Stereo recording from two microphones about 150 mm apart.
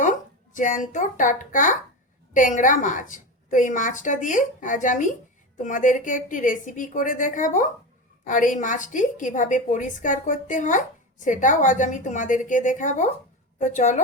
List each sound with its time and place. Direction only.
0.0 s a woman's voice: 60° left (ahead or behind)